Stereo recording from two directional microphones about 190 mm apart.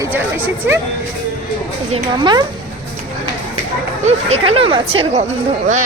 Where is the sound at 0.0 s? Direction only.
10° right (ahead or behind).